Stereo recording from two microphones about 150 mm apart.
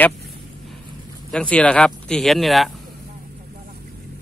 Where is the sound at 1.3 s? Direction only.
5° left (ahead or behind).